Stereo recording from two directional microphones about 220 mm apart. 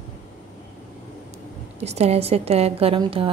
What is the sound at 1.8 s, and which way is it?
A woman's voice, 30° right (ahead or behind).